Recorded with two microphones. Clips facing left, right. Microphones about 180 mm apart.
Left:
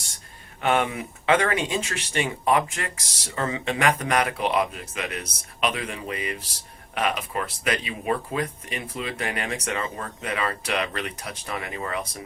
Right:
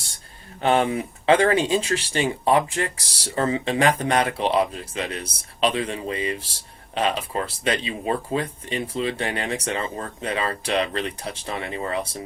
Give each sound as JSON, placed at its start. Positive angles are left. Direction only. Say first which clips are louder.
{"t": 0.6, "sound": "speech", "louder": "right 3 dB", "side_deg": -30}